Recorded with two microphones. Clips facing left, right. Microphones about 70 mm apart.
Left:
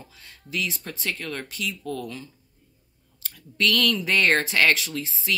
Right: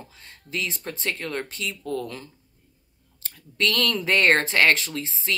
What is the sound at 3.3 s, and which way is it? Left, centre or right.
Speech, right.